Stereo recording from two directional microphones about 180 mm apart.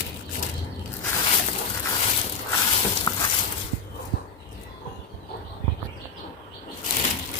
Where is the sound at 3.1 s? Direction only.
20° left (ahead or behind).